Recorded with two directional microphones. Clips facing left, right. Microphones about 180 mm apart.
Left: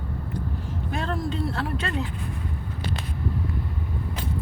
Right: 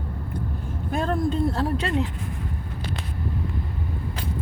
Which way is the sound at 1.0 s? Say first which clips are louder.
Right 6 dB; 45° right (ahead or behind).